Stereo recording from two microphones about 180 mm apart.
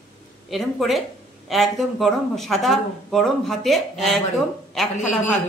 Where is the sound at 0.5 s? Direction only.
Centre (ahead or behind).